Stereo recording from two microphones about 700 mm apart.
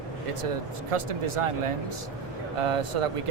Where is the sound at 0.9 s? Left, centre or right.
Right.